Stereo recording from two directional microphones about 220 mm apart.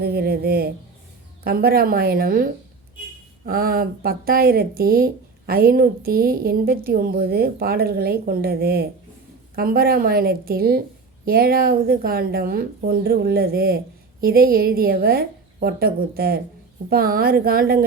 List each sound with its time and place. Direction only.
0.0 s a woman's voice: 45° right (ahead or behind)